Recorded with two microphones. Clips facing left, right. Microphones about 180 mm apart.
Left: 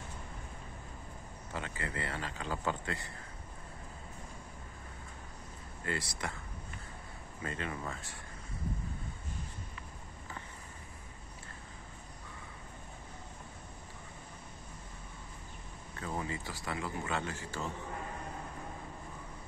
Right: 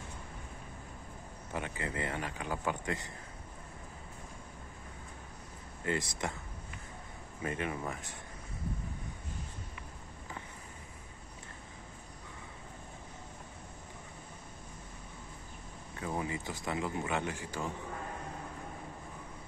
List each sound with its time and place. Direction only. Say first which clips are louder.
1.5 s a man's voice: right 2 dB; 20° right (ahead or behind)
5.9 s speech: right 4 dB; 20° right (ahead or behind)
7.4 s a man's voice: right 3 dB; 15° right (ahead or behind)
16.0 s a man's voice: right 2 dB; 15° right (ahead or behind)